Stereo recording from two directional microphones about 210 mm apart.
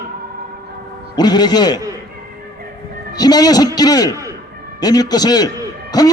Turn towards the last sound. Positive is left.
turn(degrees=20)  # may be behind; listen again after turning